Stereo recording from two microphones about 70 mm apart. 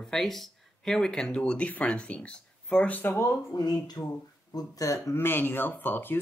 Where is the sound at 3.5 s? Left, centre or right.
Left.